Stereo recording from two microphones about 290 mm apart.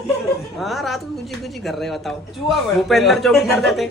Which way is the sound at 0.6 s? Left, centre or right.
Centre.